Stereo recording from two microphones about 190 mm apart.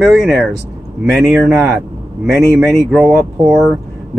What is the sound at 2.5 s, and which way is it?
Speech, centre (ahead or behind).